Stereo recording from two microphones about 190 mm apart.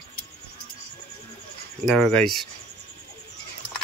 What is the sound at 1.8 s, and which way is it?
Speech, 5° left (ahead or behind).